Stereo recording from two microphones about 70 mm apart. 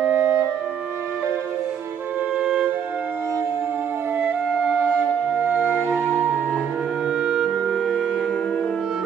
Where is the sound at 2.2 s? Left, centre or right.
Centre.